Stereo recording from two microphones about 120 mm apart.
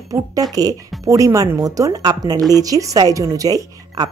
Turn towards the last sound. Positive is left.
turn(degrees=-30)  # may be behind; listen again after turning